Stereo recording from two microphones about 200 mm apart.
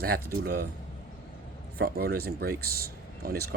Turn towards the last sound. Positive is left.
turn(degrees=-50)  # may be behind; listen again after turning